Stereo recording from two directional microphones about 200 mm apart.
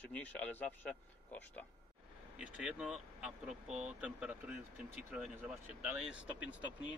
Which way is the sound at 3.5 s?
35° right (ahead or behind).